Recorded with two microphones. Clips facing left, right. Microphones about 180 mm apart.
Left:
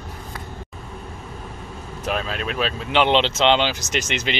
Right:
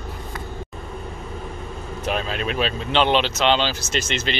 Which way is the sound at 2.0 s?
Centre (ahead or behind).